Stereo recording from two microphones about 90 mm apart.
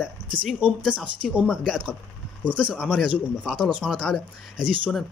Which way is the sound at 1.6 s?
5° right (ahead or behind).